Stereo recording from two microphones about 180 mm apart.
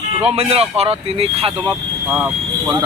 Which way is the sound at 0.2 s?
35° right (ahead or behind).